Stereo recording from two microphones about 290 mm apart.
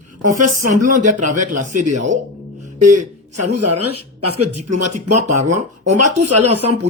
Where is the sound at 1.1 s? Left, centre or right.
Right.